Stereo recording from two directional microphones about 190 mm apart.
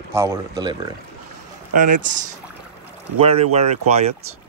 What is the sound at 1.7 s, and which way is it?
Speech, 45° right (ahead or behind).